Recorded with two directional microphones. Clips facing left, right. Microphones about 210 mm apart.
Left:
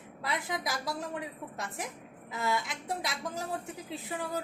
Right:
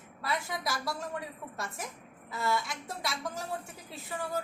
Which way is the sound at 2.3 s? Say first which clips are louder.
Even; 20° left (ahead or behind).